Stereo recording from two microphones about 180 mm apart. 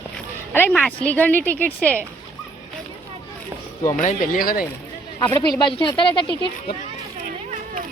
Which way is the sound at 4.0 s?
45° left (ahead or behind).